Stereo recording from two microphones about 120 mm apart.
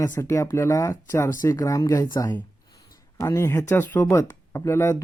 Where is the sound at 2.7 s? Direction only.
25° left (ahead or behind).